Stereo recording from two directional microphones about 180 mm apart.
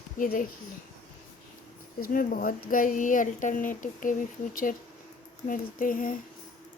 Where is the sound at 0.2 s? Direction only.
50° left (ahead or behind).